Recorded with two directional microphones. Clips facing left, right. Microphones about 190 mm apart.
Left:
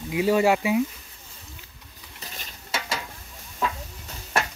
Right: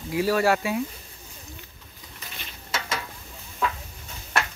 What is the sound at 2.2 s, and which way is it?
Stir, 40° left (ahead or behind).